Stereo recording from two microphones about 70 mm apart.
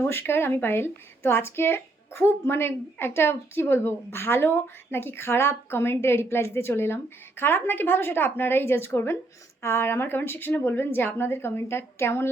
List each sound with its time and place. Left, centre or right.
0.0 s speech: left